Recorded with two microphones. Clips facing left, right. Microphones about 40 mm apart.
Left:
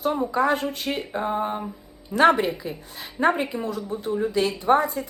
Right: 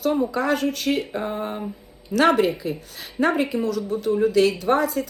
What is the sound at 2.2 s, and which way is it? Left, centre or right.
Speech, left.